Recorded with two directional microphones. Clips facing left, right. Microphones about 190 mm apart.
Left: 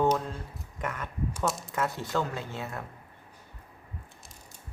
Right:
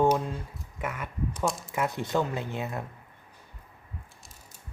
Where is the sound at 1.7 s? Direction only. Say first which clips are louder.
Right 4 dB; 15° right (ahead or behind).